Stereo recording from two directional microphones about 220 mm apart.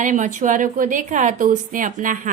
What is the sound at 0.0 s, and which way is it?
Speech, 35° right (ahead or behind).